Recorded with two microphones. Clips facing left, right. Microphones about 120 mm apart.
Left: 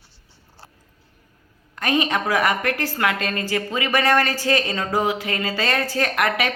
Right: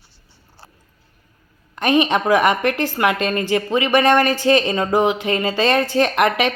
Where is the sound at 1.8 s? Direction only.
20° right (ahead or behind).